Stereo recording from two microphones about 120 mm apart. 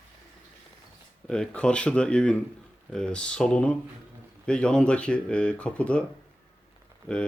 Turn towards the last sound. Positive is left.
turn(degrees=10)  # may be behind; listen again after turning